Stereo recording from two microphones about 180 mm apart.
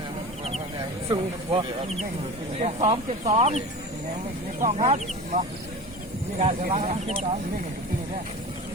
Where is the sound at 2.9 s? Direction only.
35° right (ahead or behind).